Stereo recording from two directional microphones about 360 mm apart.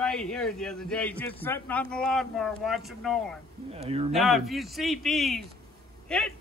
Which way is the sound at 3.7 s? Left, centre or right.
Centre.